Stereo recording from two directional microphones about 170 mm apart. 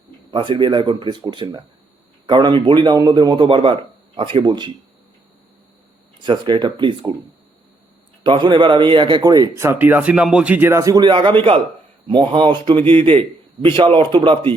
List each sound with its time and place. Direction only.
0.3 s speech: 30° right (ahead or behind)
6.2 s speech: 30° right (ahead or behind)
8.2 s speech: 30° right (ahead or behind)